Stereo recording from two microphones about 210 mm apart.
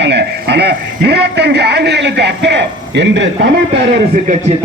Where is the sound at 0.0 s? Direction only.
55° right (ahead or behind).